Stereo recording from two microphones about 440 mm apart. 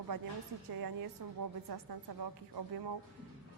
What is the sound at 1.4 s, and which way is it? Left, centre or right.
A woman's voice, right.